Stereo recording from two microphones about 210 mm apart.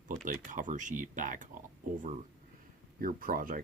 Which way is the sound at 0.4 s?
40° right (ahead or behind).